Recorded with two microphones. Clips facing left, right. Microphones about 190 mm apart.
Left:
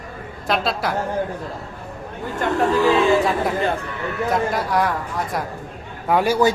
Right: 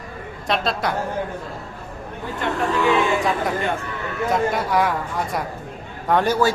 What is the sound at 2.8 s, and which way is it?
Speech, 35° left (ahead or behind).